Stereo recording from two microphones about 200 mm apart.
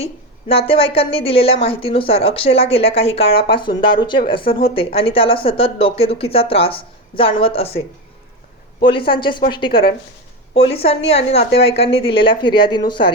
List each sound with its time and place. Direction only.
0.0 s a woman's voice: 30° left (ahead or behind)
8.8 s a woman's voice: 25° left (ahead or behind)